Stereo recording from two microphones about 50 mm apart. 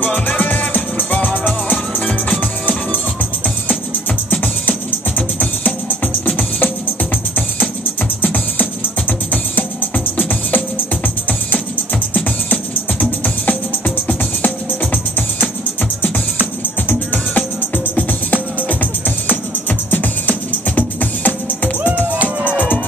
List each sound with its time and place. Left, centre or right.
0.1 s music: left
4.3 s music: left
8.2 s music: left
13.2 s music: left
16.8 s music: left
22.1 s music: right